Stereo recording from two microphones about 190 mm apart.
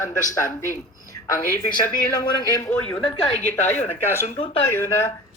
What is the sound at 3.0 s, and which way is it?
Speech, 25° left (ahead or behind).